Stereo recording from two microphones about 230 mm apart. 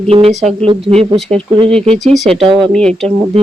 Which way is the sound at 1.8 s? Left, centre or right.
Right.